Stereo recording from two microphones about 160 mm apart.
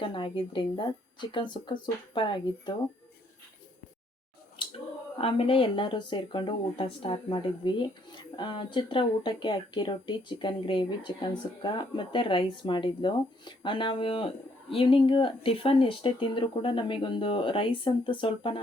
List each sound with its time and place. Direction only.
0.0 s speech: 30° left (ahead or behind)
5.1 s speech: 35° left (ahead or behind)